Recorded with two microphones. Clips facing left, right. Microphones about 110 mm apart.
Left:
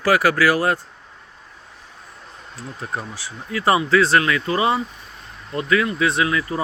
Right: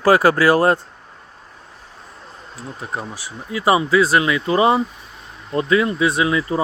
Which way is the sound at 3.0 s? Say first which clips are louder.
Right 2 dB; 20° right (ahead or behind).